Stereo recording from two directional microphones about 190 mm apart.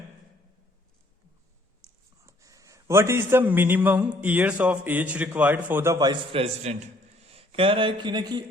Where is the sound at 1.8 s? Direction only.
15° right (ahead or behind).